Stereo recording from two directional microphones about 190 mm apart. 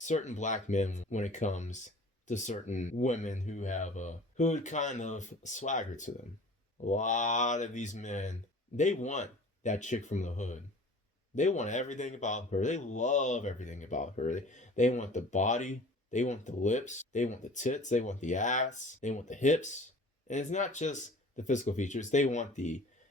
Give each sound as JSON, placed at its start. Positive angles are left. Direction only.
{"t": 0.0, "sound": "speech", "side_deg": 40}